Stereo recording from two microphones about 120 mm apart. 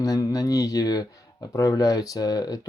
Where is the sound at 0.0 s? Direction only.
30° left (ahead or behind).